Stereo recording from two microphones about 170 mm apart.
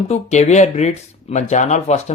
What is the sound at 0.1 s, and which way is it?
Speech, 40° left (ahead or behind).